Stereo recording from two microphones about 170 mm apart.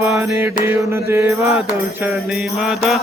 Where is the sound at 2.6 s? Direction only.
Centre (ahead or behind).